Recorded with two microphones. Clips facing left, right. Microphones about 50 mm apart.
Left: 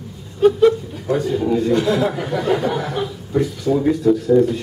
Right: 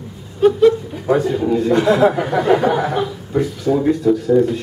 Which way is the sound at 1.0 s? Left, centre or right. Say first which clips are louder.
Right 3 dB; centre.